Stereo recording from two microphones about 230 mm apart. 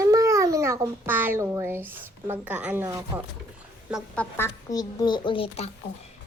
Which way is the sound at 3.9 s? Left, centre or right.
Centre.